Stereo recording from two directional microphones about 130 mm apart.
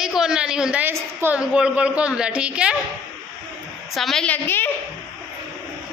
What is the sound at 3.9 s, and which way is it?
Speech, centre (ahead or behind).